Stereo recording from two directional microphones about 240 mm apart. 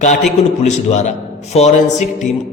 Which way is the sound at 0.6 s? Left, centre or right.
Left.